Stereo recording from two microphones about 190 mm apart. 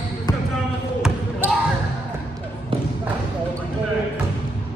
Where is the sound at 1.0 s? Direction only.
5° right (ahead or behind).